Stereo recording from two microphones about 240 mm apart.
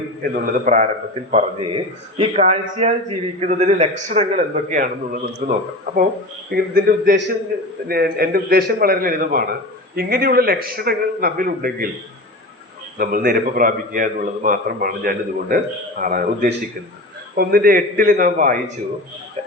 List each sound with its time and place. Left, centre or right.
0.2 s a man's voice: right
13.0 s a man's voice: right